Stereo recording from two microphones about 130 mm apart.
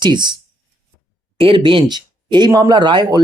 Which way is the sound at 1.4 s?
40° right (ahead or behind).